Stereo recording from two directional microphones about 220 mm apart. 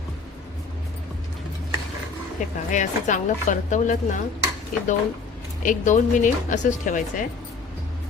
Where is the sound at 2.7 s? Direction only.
35° left (ahead or behind).